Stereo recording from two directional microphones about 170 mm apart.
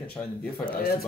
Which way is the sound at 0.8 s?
60° left (ahead or behind).